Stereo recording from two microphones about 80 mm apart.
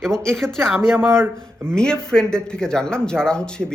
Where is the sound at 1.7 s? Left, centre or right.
Centre.